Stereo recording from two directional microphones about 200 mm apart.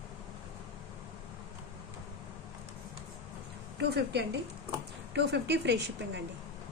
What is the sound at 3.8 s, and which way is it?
A woman's voice, 55° right (ahead or behind).